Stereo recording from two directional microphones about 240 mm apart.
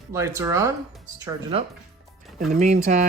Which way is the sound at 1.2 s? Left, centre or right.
Right.